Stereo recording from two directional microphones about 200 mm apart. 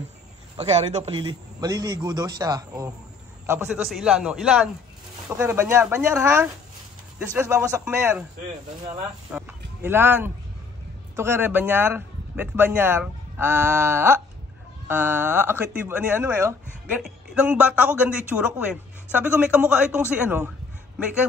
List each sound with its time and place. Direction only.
0.6 s a man's voice: 30° right (ahead or behind); by 8.3 s 10° right (ahead or behind)
9.3 s a sound: 10° right (ahead or behind)
11.1 s speech: 10° right (ahead or behind)